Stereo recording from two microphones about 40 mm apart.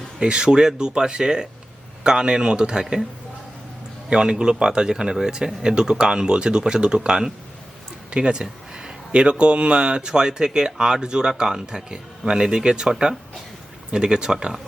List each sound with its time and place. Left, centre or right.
0.2 s speech: right
4.1 s speech: centre
13.9 s speech: right